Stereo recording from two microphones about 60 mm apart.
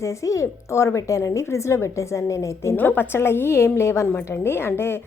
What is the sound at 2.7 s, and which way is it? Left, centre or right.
A woman's voice, left.